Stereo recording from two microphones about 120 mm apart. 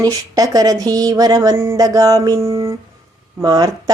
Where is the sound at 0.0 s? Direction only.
30° right (ahead or behind).